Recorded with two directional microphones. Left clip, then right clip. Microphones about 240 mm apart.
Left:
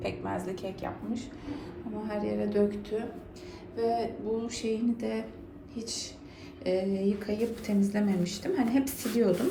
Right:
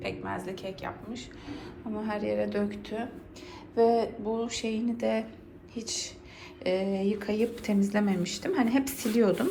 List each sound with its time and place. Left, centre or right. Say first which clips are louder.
0.0 s a woman's voice: left 1 dB; centre